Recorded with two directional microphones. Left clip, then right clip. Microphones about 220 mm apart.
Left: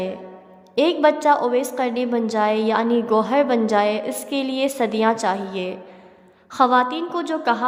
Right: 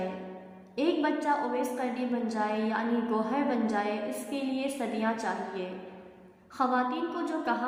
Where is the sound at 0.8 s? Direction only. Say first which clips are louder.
Left 12 dB; 50° left (ahead or behind).